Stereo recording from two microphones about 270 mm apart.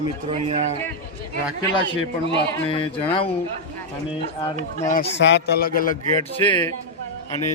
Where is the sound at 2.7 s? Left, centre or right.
Centre.